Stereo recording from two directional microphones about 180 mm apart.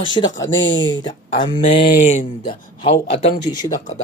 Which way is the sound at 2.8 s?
30° left (ahead or behind).